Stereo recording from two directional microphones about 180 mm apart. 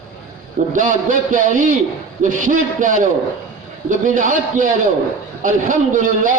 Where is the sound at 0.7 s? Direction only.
45° right (ahead or behind).